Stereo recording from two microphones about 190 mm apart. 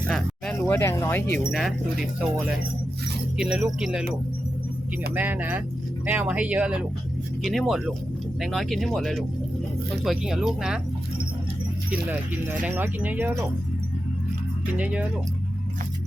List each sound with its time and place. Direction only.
0.1 s speech: 5° left (ahead or behind)
1.5 s speech: centre (ahead or behind)
5.1 s speech: 10° right (ahead or behind)
12.5 s speech: 10° right (ahead or behind)